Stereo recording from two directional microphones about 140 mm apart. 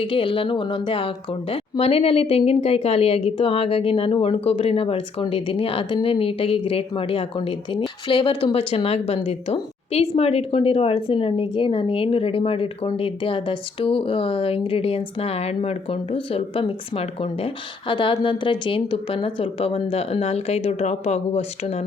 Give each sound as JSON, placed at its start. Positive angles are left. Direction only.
{"t": 0.0, "sound": "a woman's voice", "side_deg": 40}